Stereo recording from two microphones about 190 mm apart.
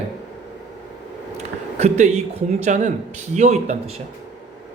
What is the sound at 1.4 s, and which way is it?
A man's voice, 35° right (ahead or behind).